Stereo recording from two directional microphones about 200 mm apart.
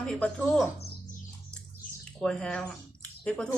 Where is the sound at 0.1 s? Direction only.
5° left (ahead or behind).